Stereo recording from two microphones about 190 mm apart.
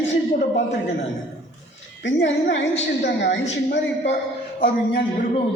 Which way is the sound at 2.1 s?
75° left (ahead or behind).